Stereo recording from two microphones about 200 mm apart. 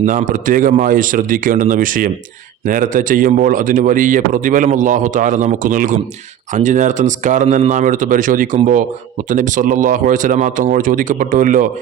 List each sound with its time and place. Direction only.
0.0 s a man's voice: 40° right (ahead or behind)